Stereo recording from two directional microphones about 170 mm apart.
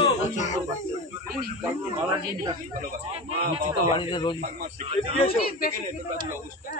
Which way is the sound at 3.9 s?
30° left (ahead or behind).